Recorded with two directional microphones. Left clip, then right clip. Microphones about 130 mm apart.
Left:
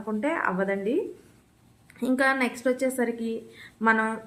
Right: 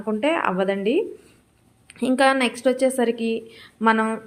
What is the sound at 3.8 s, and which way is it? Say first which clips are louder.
Speech: right 3 dB; 25° right (ahead or behind).